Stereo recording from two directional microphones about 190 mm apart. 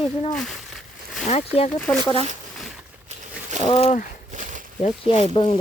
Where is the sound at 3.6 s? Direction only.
35° left (ahead or behind).